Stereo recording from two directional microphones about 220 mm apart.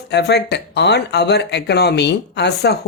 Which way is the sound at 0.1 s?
50° left (ahead or behind).